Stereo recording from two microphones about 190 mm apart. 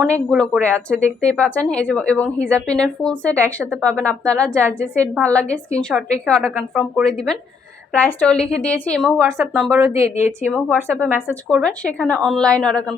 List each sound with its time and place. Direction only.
0.1 s a woman's voice: centre (ahead or behind)
9.7 s speech: 15° right (ahead or behind)
10.5 s a woman's voice: 5° left (ahead or behind)